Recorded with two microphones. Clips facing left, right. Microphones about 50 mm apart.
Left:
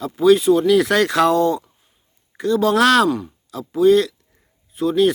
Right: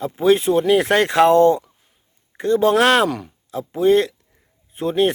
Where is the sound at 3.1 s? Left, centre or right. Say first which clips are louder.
Left 5 dB; right.